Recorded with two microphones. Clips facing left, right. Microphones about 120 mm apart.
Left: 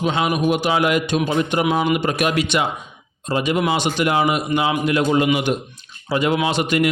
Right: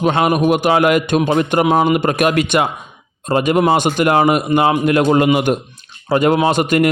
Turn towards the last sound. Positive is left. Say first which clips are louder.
# right 5 dB
turn(degrees=-45)  # may be behind; listen again after turning